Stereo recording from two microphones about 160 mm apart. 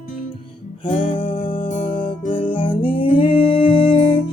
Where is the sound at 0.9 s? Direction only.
60° left (ahead or behind).